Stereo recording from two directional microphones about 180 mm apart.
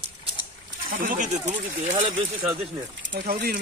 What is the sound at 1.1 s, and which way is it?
Speech, 45° right (ahead or behind).